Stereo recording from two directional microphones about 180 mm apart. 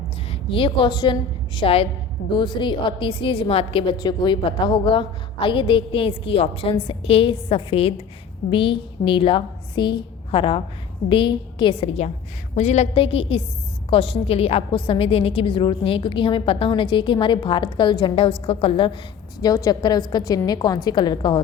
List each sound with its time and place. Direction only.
0.3 s a woman's voice: 30° left (ahead or behind)
19.4 s a woman's voice: 20° left (ahead or behind)